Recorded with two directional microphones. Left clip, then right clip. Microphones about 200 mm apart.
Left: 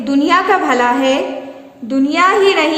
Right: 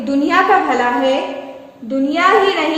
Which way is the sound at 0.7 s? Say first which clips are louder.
Left 2 dB; 30° left (ahead or behind).